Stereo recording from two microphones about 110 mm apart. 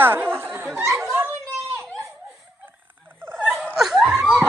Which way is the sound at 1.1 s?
25° right (ahead or behind).